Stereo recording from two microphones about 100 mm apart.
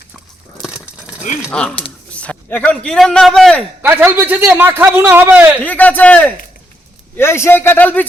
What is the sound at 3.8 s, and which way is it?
Speech, 20° right (ahead or behind).